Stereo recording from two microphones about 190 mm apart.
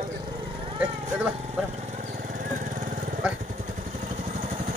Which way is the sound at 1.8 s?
40° right (ahead or behind).